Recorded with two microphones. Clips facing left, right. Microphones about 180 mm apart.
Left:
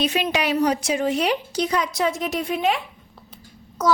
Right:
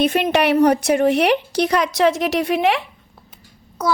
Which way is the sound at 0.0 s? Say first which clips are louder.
Right 6 dB; 55° right (ahead or behind).